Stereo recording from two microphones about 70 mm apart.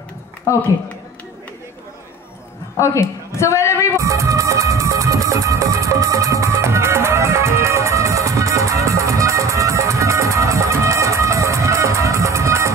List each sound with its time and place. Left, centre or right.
0.5 s speech: left
2.8 s a man's voice: left
3.9 s music: right